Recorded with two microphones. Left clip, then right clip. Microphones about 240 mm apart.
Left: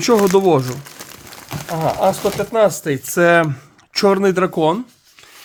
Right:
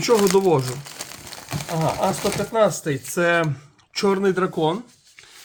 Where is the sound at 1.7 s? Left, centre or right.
Left.